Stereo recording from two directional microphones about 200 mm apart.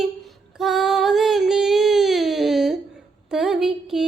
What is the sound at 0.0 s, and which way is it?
Female singing, centre (ahead or behind).